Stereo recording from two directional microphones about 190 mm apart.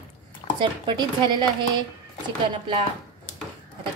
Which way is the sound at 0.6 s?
25° right (ahead or behind).